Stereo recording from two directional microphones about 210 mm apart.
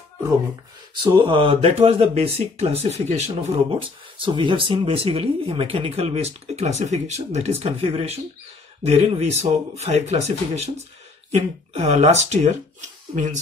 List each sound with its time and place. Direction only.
1.0 s speech: 25° right (ahead or behind)